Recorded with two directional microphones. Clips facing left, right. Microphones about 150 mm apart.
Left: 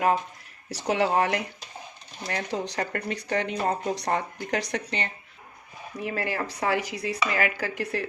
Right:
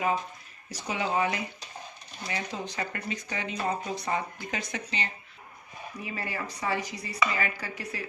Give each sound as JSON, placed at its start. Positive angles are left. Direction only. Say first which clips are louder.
{"t": 0.7, "sound": "speech", "louder": "left 6 dB", "side_deg": 75}